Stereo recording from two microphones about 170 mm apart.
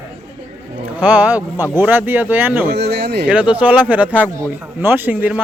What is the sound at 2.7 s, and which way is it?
Speech, 80° right.